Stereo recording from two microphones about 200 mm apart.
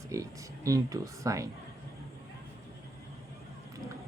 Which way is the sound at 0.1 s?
15° right (ahead or behind).